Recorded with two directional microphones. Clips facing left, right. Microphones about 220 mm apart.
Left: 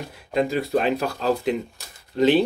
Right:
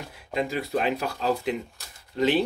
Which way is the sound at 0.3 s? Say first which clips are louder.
Left 5 dB; 40° left (ahead or behind).